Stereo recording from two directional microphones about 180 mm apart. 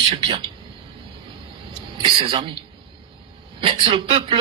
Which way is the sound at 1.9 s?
30° right (ahead or behind).